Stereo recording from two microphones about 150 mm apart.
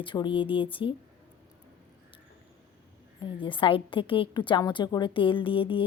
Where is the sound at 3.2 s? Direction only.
35° left (ahead or behind).